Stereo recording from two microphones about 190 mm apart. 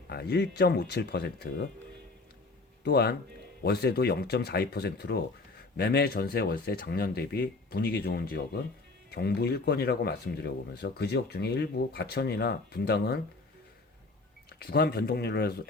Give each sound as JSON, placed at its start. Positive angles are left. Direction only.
{"t": 0.1, "sound": "speech", "side_deg": 60}
{"t": 2.8, "sound": "speech", "side_deg": 60}
{"t": 14.6, "sound": "speech", "side_deg": 55}